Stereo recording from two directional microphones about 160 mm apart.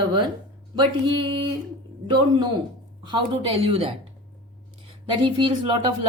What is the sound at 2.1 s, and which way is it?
Speech, 30° right (ahead or behind).